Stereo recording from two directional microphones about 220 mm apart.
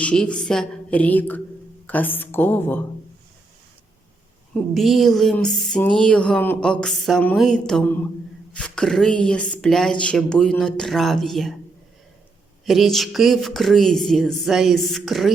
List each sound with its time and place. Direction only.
0.0 s a woman's voice: 5° left (ahead or behind)
4.7 s speech: centre (ahead or behind)
12.6 s speech: centre (ahead or behind)